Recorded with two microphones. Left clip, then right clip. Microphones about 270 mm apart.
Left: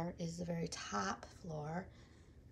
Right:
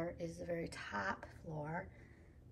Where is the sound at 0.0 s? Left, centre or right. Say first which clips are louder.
Right 1 dB; centre.